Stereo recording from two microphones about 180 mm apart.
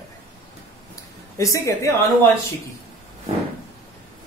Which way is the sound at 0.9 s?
20° left (ahead or behind).